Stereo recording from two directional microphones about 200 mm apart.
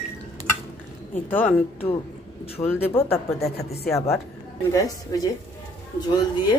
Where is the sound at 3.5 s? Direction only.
50° left (ahead or behind).